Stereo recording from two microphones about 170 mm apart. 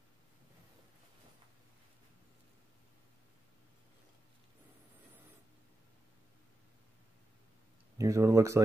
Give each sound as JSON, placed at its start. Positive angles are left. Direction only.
{"t": 8.0, "sound": "speech", "side_deg": -20}